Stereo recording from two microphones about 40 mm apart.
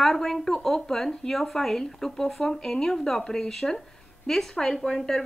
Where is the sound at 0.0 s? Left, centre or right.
Centre.